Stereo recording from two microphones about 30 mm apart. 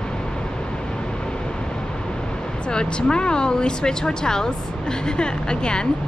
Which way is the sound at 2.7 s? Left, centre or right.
Left.